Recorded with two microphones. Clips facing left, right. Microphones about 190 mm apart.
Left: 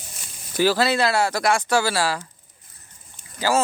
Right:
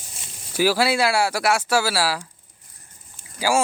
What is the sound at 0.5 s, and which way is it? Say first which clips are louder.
Speech: even; 10° right (ahead or behind).